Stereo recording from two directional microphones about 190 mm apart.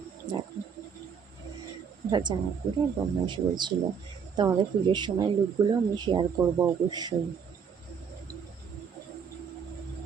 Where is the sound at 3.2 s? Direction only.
25° right (ahead or behind).